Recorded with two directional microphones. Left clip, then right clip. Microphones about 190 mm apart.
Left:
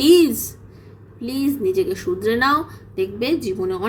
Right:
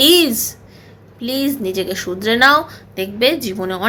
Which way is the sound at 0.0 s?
5° left (ahead or behind).